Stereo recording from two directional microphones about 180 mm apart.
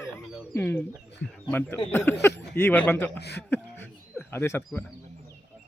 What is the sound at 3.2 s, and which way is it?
Speech, 65° left (ahead or behind).